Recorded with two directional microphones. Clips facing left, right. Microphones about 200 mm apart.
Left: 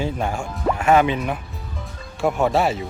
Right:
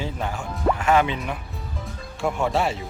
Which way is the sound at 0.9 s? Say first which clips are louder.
Left 6 dB; 45° left (ahead or behind).